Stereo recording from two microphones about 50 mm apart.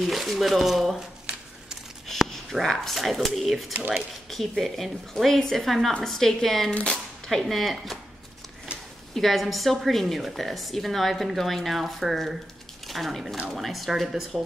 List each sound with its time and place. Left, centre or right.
0.0 s a woman's voice: centre
2.0 s a sound: centre
2.6 s a woman's voice: centre
6.7 s speech: left
7.2 s a woman's voice: centre
9.1 s a woman's voice: centre